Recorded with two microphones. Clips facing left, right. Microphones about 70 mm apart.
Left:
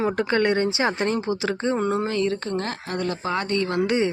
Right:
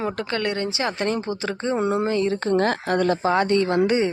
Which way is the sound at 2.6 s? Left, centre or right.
Right.